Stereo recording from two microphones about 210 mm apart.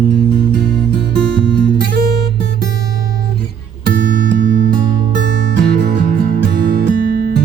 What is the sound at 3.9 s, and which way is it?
Music, 45° right (ahead or behind).